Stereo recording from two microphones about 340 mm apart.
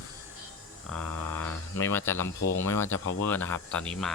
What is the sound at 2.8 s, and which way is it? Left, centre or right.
Speech, left.